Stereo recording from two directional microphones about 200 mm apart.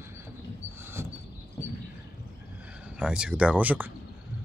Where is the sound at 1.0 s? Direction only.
10° right (ahead or behind).